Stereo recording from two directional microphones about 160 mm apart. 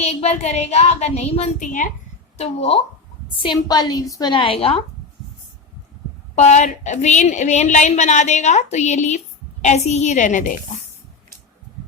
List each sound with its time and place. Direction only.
0.0 s a woman's voice: 40° left (ahead or behind)
2.4 s speech: 40° left (ahead or behind)
3.4 s a woman's voice: 25° left (ahead or behind)
6.3 s a woman's voice: 45° left (ahead or behind)